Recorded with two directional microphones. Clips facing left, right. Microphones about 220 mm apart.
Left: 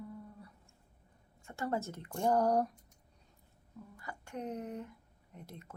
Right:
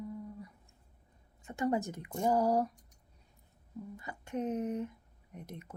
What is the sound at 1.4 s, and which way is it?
A woman's voice, 20° right (ahead or behind).